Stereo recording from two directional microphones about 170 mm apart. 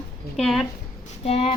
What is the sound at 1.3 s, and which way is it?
Speech, 35° left (ahead or behind).